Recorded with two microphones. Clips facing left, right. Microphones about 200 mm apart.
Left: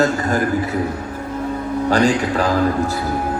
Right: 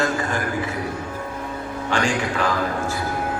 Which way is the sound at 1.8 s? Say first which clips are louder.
Left 6 dB; 40° left (ahead or behind).